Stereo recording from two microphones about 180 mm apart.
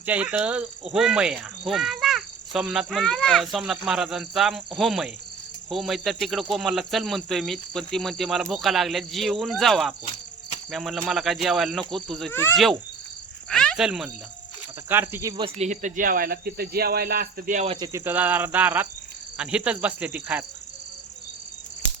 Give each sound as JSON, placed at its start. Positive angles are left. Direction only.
{"t": 0.0, "sound": "cricket", "side_deg": -10}
{"t": 12.3, "sound": "insect", "side_deg": 15}
{"t": 13.5, "sound": "speech", "side_deg": 5}
{"t": 17.7, "sound": "speech", "side_deg": -20}